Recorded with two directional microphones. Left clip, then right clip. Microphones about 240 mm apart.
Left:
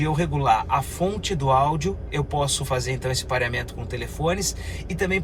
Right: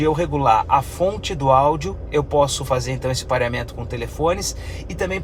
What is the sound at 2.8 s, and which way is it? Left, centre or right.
Speech, right.